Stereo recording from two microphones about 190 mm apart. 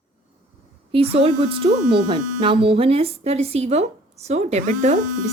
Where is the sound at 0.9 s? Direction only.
30° right (ahead or behind).